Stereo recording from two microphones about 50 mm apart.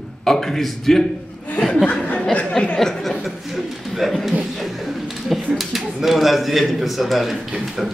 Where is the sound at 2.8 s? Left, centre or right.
Centre.